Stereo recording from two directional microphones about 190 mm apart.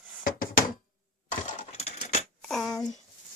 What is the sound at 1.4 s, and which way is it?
Coin, 35° left (ahead or behind).